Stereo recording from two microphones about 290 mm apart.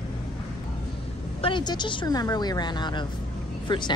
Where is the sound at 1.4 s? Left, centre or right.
Centre.